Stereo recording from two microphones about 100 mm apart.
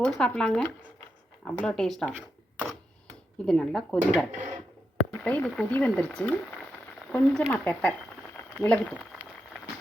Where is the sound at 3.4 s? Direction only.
5° left (ahead or behind).